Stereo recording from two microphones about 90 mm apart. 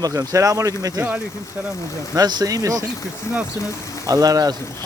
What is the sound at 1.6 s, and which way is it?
Speech, 15° right (ahead or behind).